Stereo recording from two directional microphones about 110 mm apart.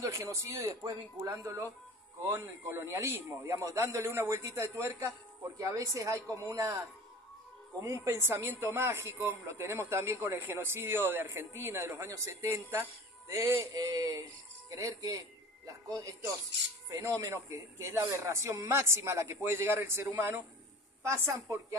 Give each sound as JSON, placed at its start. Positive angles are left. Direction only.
{"t": 0.0, "sound": "a man's voice", "side_deg": -30}
{"t": 7.8, "sound": "a man's voice", "side_deg": -25}